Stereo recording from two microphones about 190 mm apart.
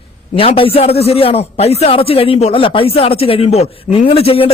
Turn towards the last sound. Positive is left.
turn(degrees=30)  # may be behind; listen again after turning